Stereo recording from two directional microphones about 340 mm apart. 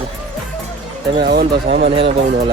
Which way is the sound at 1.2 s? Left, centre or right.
Right.